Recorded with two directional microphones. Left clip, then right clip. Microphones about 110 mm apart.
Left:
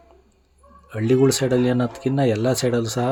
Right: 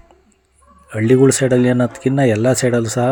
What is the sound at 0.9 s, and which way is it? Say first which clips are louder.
Speech: right 6 dB; 25° right (ahead or behind).